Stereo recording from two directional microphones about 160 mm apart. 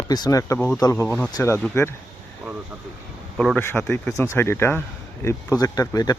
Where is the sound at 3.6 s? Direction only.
15° left (ahead or behind).